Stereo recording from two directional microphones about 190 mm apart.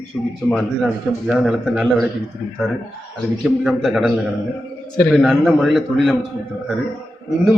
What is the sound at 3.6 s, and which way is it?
A man's voice, centre (ahead or behind).